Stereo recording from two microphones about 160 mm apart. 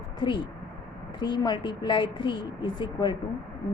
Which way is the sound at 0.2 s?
30° left (ahead or behind).